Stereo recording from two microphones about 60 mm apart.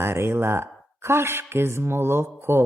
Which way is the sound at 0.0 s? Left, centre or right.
Right.